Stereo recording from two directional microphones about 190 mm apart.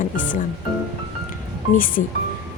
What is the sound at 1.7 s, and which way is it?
Speech, 45° left (ahead or behind).